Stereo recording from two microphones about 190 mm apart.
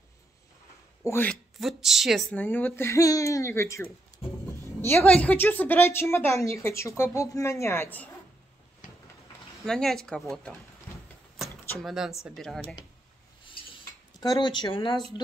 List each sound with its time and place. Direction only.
1.0 s a woman's voice: 10° left (ahead or behind)
9.7 s speech: 5° left (ahead or behind)
11.8 s speech: centre (ahead or behind)
13.4 s cutlery: 25° left (ahead or behind)